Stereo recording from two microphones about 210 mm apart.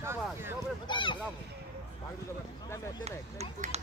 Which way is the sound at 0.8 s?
25° left (ahead or behind).